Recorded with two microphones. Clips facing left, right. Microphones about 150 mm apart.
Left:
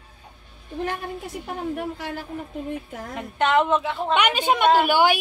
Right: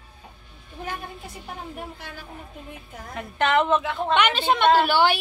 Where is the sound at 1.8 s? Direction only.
65° left (ahead or behind).